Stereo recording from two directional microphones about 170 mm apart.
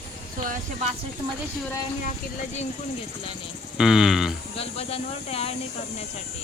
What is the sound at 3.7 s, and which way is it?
Speech, 5° right (ahead or behind).